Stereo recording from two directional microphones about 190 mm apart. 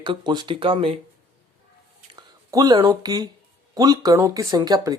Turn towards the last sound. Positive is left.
turn(degrees=-20)  # may be behind; listen again after turning